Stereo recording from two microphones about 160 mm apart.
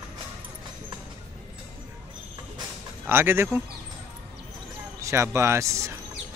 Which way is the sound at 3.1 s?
15° right (ahead or behind).